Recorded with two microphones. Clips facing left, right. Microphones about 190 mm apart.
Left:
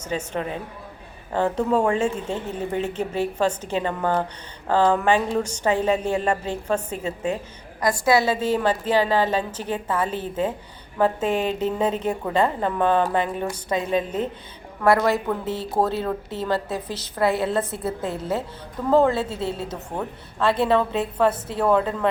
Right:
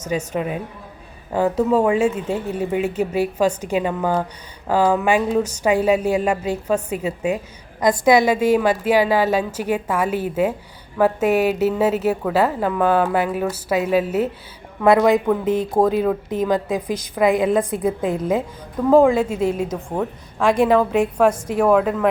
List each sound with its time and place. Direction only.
0.3 s a woman's voice: 10° right (ahead or behind)
7.8 s a woman's voice: 20° right (ahead or behind)